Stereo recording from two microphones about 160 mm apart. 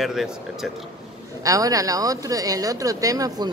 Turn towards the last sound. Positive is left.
turn(degrees=-20)  # may be behind; listen again after turning